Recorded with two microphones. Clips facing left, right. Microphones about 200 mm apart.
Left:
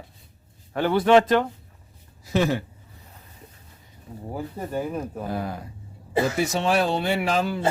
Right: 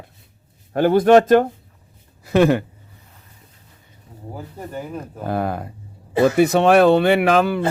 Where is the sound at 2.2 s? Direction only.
60° right (ahead or behind).